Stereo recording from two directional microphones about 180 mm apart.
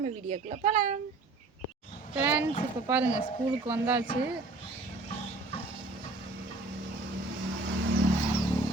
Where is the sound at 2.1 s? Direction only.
10° right (ahead or behind).